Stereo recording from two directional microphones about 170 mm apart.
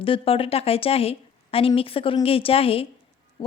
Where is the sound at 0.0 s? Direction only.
35° left (ahead or behind).